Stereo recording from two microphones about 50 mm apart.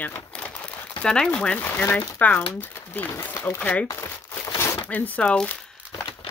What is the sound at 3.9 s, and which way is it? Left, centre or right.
Crumpling, left.